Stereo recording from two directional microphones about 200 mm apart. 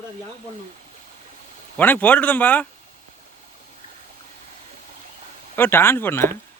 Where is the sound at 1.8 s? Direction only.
10° left (ahead or behind).